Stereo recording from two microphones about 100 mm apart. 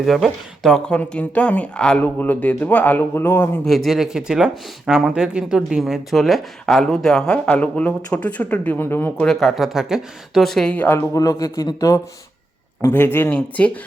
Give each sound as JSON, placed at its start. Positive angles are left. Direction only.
{"t": 0.0, "sound": "speech", "side_deg": 0}
{"t": 3.7, "sound": "speech", "side_deg": 0}
{"t": 9.2, "sound": "speech", "side_deg": 5}
{"t": 10.8, "sound": "speech", "side_deg": 20}
{"t": 11.1, "sound": "speech", "side_deg": 35}
{"t": 12.8, "sound": "speech", "side_deg": 20}